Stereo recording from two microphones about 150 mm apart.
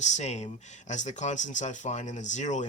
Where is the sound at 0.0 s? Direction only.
50° left (ahead or behind).